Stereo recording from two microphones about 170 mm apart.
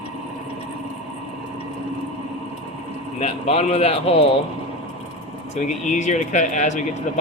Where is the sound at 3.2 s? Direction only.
35° left (ahead or behind).